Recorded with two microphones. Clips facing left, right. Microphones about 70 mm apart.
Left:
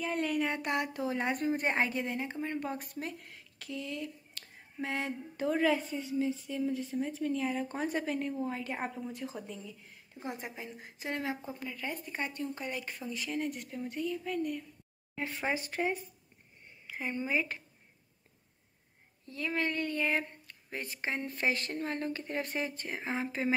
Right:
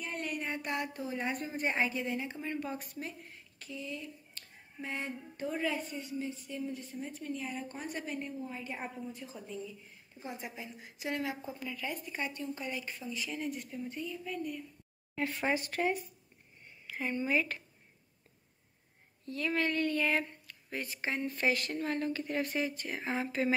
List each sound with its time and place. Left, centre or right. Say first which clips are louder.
0.4 s a woman's voice: left 4 dB; left
8.8 s a woman's voice: left 4 dB; left
12.4 s speech: left 1 dB; left
15.5 s a woman's voice: right 1 dB; left
19.2 s speech: right 1 dB; centre
22.9 s speech: right 1 dB; centre